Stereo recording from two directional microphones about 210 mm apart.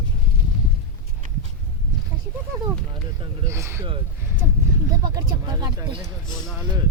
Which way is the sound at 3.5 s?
10° right (ahead or behind).